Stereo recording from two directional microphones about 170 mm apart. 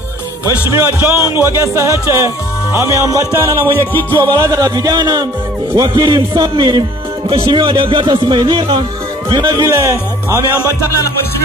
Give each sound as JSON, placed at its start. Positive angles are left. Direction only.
{"t": 0.7, "sound": "speech", "side_deg": -15}
{"t": 3.7, "sound": "music", "side_deg": 10}
{"t": 4.2, "sound": "speech", "side_deg": -20}